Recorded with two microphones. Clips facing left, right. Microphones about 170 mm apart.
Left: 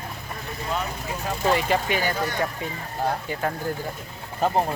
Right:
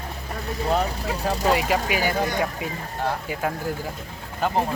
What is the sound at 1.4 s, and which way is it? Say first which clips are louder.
Speech: left 1 dB; 5° right (ahead or behind).